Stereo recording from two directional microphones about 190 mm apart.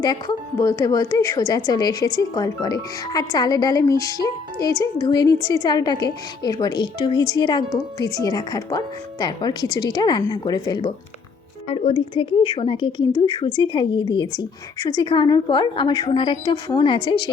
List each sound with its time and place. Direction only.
0.0 s a woman's voice: 20° left (ahead or behind)